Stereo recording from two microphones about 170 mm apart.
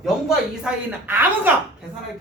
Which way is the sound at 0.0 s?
5° right (ahead or behind).